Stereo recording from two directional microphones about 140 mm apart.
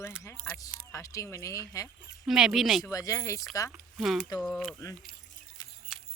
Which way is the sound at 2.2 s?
5° right (ahead or behind).